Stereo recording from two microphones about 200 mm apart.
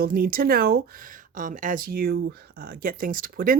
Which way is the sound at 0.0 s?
45° right (ahead or behind).